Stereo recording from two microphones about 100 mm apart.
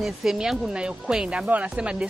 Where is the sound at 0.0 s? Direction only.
5° right (ahead or behind).